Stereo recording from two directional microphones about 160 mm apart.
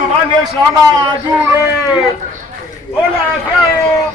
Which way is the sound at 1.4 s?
15° right (ahead or behind).